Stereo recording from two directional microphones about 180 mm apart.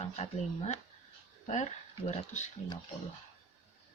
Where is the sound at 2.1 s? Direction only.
40° left (ahead or behind).